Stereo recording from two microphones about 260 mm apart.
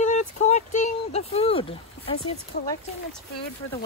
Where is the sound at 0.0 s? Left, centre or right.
Left.